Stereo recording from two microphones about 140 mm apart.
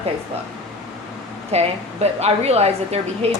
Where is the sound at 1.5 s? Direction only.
50° right (ahead or behind).